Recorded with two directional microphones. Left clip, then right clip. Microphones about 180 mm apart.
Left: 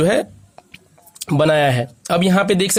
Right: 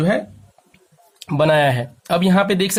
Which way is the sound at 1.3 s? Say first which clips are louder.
Even; 25° left (ahead or behind).